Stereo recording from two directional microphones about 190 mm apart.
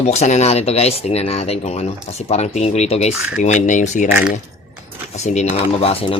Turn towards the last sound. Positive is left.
turn(degrees=30)  # may be behind; listen again after turning